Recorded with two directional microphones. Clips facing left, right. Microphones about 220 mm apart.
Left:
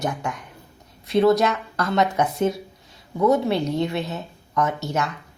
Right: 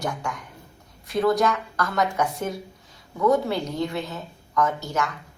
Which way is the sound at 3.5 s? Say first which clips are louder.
Left 4 dB; 25° left (ahead or behind).